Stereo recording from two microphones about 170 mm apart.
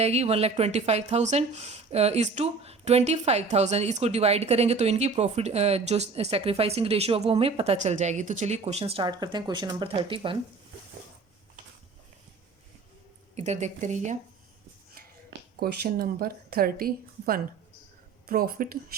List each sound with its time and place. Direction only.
0.0 s speech: 40° right (ahead or behind)
13.3 s speech: 40° right (ahead or behind)
14.9 s speech: 65° right (ahead or behind)